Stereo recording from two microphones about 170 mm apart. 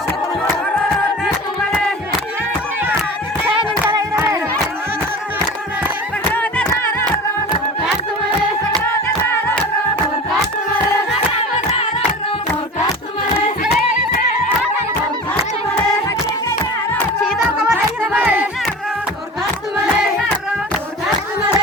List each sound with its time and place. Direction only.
3.8 s music: 15° right (ahead or behind)
6.3 s a sound: 10° left (ahead or behind)
8.8 s clapping: 15° left (ahead or behind)
11.1 s singing: 35° left (ahead or behind)
13.7 s music: 50° left (ahead or behind)
17.2 s music: 5° right (ahead or behind)